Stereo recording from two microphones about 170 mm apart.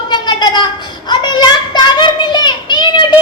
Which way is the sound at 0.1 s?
25° left (ahead or behind).